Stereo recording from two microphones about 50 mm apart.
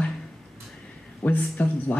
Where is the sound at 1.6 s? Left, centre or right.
Left.